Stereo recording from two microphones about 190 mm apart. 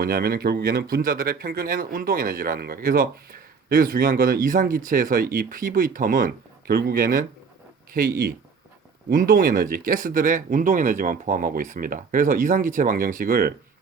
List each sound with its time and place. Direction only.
0.0 s speech: 50° right (ahead or behind)